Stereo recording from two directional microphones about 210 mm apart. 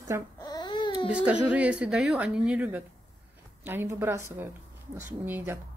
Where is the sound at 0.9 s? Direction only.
5° right (ahead or behind).